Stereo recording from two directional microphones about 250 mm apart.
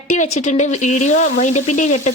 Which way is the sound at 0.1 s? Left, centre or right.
Left.